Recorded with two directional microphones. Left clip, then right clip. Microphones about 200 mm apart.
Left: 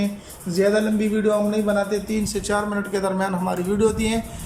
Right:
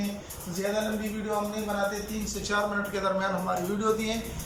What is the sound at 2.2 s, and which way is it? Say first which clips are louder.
A man's voice: left 5 dB; 40° left (ahead or behind).